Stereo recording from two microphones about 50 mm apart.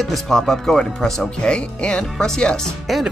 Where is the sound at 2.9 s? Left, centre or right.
Centre.